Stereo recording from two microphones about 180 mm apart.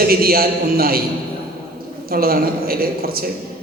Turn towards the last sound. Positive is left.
turn(degrees=-55)  # may be behind; listen again after turning